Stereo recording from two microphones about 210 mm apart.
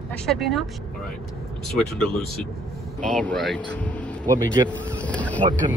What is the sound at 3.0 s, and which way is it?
Speech, 5° left (ahead or behind).